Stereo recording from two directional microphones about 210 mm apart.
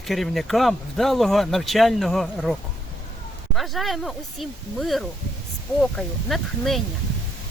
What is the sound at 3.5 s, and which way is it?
Speech, centre (ahead or behind).